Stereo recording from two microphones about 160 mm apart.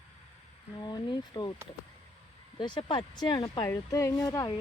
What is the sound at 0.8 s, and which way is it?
Speech, 25° left (ahead or behind).